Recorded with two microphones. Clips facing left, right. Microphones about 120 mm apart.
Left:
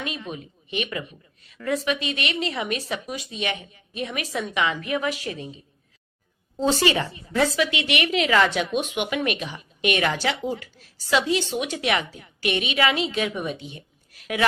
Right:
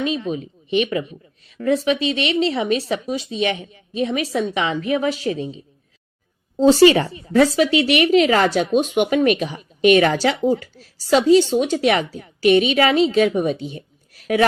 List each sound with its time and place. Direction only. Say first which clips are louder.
0.0 s a woman's voice: right 10 dB; 30° right (ahead or behind)